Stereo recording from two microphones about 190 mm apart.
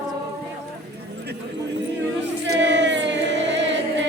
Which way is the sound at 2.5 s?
70° right (ahead or behind).